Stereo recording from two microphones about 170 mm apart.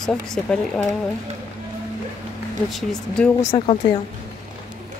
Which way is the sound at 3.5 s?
30° left (ahead or behind).